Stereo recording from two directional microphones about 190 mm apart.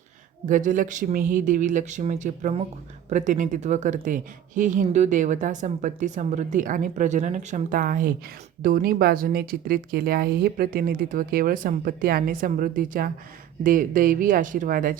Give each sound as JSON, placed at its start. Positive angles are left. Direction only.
{"t": 0.4, "sound": "a woman's voice", "side_deg": -45}